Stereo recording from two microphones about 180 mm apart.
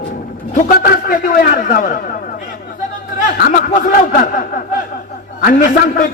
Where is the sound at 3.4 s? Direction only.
50° left (ahead or behind).